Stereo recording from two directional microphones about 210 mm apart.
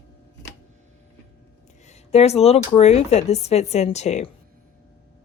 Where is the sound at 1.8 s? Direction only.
30° left (ahead or behind).